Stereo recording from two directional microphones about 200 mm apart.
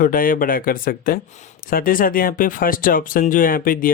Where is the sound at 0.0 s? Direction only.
45° left (ahead or behind).